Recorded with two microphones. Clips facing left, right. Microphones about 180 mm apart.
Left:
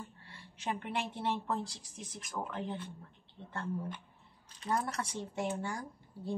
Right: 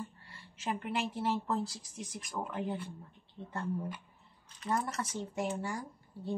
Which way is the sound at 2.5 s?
10° right (ahead or behind).